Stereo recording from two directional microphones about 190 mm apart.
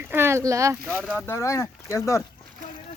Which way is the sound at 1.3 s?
15° left (ahead or behind).